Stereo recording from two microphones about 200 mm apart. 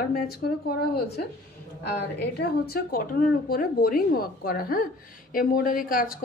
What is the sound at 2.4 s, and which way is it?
Speech, 50° left (ahead or behind).